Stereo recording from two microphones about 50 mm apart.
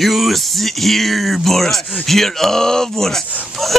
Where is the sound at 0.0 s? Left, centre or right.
Centre.